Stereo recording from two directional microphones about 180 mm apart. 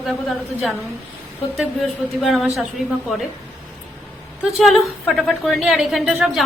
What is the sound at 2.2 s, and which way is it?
Speech, centre (ahead or behind).